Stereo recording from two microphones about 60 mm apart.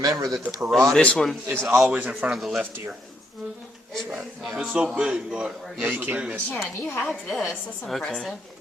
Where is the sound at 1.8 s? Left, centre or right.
Centre.